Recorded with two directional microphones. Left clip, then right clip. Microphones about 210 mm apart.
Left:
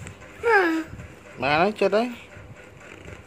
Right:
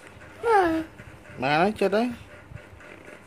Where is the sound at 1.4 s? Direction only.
20° right (ahead or behind).